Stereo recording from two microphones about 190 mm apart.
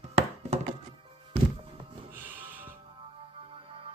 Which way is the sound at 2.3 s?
10° right (ahead or behind).